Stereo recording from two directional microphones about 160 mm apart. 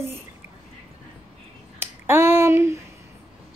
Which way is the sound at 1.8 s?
15° right (ahead or behind).